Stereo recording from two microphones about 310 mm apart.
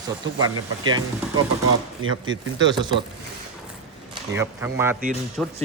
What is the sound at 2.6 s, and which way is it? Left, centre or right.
Speech, centre.